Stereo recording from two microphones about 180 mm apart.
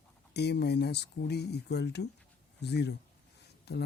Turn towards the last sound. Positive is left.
turn(degrees=65)  # may be behind; listen again after turning